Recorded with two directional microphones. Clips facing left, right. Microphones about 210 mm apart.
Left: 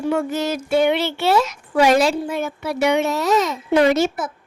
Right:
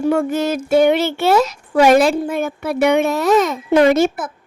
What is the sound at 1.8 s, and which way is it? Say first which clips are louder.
A woman's voice: right 5 dB; 55° right (ahead or behind).